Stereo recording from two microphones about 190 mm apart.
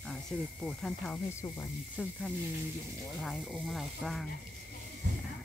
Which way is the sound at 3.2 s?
Centre (ahead or behind).